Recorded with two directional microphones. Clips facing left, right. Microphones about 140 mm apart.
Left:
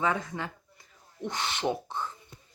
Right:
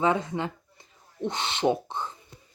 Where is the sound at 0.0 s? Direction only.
20° right (ahead or behind).